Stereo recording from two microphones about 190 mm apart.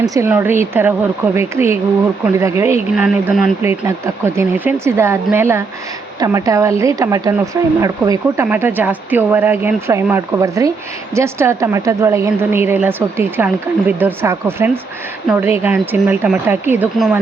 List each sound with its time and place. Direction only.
0.0 s a woman's voice: 15° right (ahead or behind)